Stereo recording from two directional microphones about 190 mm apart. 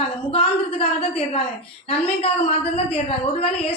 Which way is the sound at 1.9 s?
30° left (ahead or behind).